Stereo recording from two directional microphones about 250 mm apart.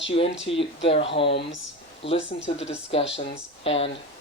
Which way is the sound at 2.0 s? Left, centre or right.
Left.